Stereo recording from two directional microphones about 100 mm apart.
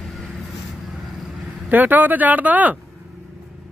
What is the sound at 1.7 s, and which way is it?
Speech, 20° right (ahead or behind).